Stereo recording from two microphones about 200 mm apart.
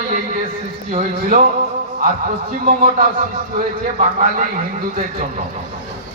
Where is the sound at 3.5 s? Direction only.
40° right (ahead or behind).